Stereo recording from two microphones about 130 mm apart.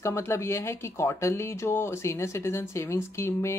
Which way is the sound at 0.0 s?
20° left (ahead or behind).